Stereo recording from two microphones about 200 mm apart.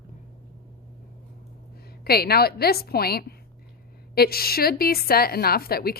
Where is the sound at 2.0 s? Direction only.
50° left (ahead or behind).